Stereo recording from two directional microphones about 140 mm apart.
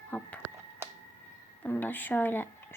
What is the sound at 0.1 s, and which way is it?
Speech, 10° left (ahead or behind).